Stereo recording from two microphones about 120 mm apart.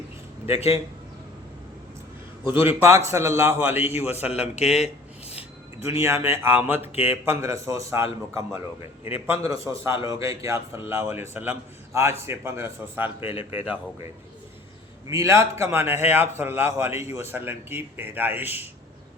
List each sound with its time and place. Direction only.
0.4 s speech: 55° left (ahead or behind)
2.5 s a man's voice: 20° right (ahead or behind)
4.3 s speech: 60° left (ahead or behind)
5.8 s a man's voice: 20° right (ahead or behind)
6.7 s speech: 60° left (ahead or behind)
7.0 s a man's voice: 20° right (ahead or behind)
15.0 s a man's voice: 25° right (ahead or behind)